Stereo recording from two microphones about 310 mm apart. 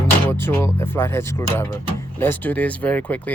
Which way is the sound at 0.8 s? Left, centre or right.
Centre.